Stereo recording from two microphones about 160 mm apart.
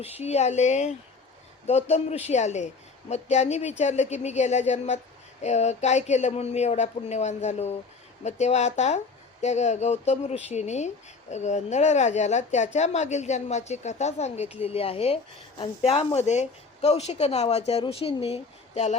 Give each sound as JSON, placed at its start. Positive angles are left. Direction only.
{"t": 0.0, "sound": "speech", "side_deg": 40}